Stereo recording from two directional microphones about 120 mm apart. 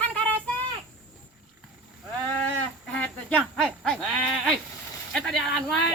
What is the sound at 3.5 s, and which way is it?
Speech, 5° left (ahead or behind).